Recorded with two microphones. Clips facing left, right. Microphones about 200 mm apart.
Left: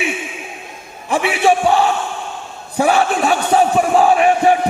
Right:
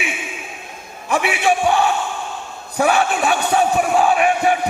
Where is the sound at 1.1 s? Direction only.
30° left (ahead or behind).